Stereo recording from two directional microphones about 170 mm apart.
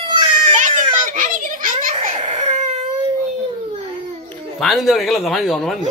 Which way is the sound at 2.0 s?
45° right (ahead or behind).